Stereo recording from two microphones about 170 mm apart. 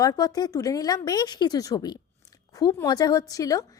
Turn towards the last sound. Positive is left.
turn(degrees=20)  # may be behind; listen again after turning